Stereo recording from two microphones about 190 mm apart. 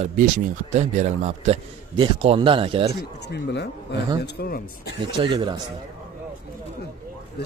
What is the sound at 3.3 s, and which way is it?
Speech, 65° left (ahead or behind).